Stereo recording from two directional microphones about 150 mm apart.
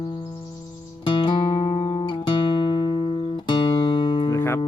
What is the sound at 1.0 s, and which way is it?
Music, 35° left (ahead or behind).